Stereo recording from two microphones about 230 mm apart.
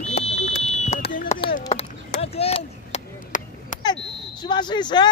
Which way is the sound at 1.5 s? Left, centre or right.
Left.